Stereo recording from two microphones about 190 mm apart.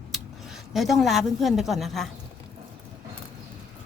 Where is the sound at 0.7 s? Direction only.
Centre (ahead or behind).